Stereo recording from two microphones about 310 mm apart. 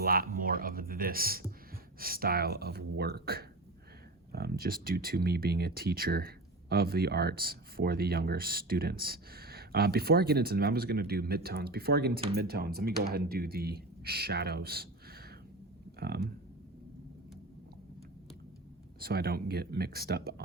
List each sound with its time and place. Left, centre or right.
0.0 s speech: right
18.9 s speech: right